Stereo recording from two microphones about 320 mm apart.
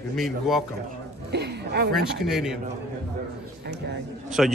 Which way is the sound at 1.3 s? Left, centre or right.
Right.